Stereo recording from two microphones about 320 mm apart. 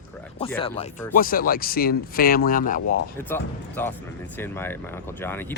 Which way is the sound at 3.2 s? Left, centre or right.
Centre.